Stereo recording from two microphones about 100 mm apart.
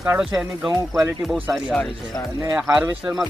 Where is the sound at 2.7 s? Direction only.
15° right (ahead or behind).